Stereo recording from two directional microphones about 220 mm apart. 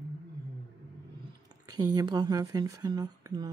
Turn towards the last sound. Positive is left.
turn(degrees=-15)  # may be behind; listen again after turning